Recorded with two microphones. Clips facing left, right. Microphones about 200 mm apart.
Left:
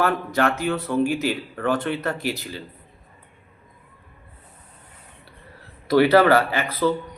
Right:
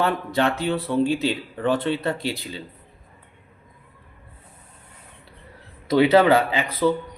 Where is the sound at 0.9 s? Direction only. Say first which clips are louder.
Right 1 dB; 20° right (ahead or behind).